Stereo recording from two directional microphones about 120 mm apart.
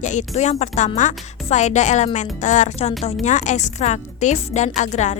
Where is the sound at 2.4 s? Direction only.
90° left; by 5.1 s 75° left (ahead or behind).